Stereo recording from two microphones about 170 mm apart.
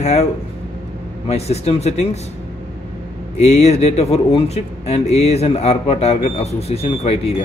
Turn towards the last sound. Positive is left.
turn(degrees=35)  # may be behind; listen again after turning